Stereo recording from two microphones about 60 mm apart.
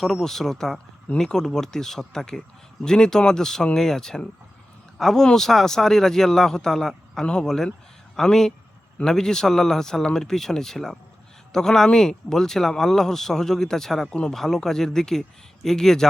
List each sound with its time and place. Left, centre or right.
0.0 s speech: centre